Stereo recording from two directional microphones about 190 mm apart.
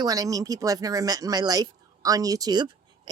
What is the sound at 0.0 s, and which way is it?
A woman's voice, 20° right (ahead or behind).